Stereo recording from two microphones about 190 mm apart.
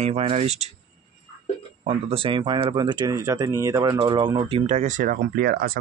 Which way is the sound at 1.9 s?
30° right (ahead or behind).